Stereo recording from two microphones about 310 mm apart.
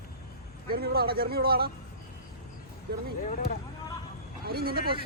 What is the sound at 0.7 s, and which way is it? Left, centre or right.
Speech, right.